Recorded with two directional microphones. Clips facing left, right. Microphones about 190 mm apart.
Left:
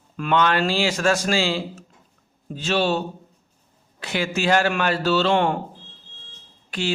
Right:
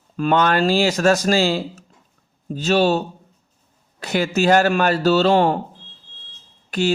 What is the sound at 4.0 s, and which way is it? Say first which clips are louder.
A man's voice: right 5 dB; 40° right (ahead or behind).